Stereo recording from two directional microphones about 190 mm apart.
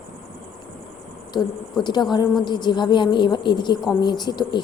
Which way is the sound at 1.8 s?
20° left (ahead or behind).